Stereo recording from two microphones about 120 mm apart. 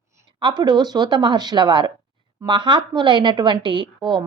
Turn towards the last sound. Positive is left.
turn(degrees=-40)  # may be behind; listen again after turning